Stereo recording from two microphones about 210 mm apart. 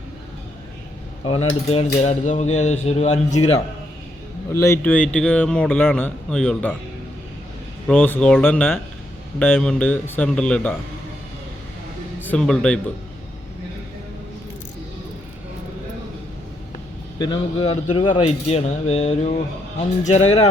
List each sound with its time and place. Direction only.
1.7 s cutlery: 30° left (ahead or behind)
4.5 s speech: 15° left (ahead or behind)
7.9 s speech: 10° left (ahead or behind)
12.2 s speech: 5° left (ahead or behind)
17.2 s cutlery: 25° left (ahead or behind)